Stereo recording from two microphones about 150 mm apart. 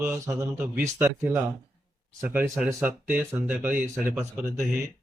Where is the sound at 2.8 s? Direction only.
15° right (ahead or behind).